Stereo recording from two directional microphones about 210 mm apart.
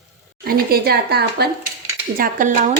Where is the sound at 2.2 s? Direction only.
40° right (ahead or behind).